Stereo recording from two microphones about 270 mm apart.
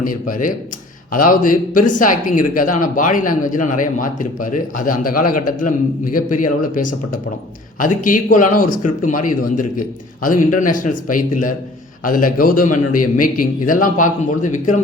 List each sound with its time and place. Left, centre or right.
0.0 s a man's voice: left